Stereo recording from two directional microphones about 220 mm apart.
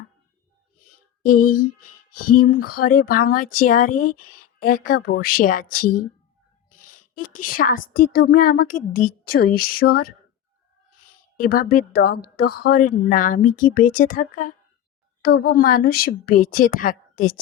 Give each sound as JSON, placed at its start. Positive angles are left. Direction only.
{"t": 1.2, "sound": "a woman's voice", "side_deg": 40}
{"t": 11.3, "sound": "a woman's voice", "side_deg": 40}